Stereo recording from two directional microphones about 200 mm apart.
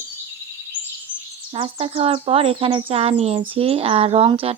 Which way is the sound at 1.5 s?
30° right (ahead or behind).